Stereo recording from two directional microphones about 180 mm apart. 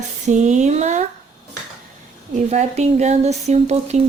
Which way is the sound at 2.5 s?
40° right (ahead or behind).